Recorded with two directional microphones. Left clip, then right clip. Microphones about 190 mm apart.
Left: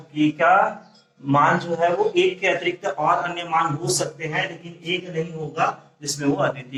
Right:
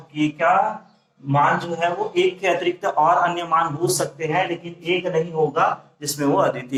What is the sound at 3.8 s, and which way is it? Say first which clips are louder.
Speech: right 3 dB; 15° right (ahead or behind).